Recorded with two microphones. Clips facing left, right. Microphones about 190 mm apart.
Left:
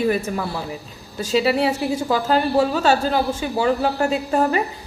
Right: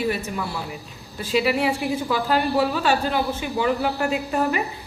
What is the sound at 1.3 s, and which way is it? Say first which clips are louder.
A woman's voice: left 2 dB; 30° left (ahead or behind).